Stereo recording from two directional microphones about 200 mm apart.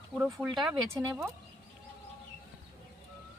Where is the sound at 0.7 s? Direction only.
10° right (ahead or behind).